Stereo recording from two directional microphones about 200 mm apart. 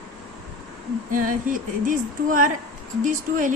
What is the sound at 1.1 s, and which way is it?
Speech, 45° right (ahead or behind).